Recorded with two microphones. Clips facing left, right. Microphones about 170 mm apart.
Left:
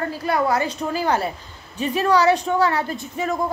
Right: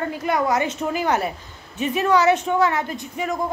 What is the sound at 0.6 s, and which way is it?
A woman's voice, 35° left (ahead or behind).